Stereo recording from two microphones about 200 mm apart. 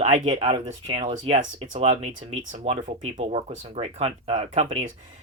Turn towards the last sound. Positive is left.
turn(degrees=-30)  # may be behind; listen again after turning